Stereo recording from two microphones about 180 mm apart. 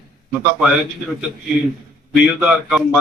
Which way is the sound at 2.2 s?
Centre (ahead or behind).